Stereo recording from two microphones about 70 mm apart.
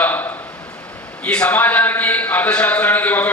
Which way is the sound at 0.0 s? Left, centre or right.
Left.